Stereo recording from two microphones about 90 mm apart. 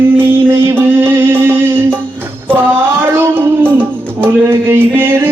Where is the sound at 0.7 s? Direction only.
25° right (ahead or behind).